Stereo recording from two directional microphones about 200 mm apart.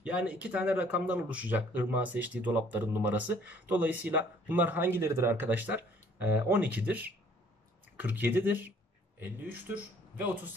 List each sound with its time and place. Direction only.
0.0 s speech: 5° right (ahead or behind)